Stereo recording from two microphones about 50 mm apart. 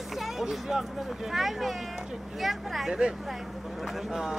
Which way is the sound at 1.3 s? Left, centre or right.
Centre.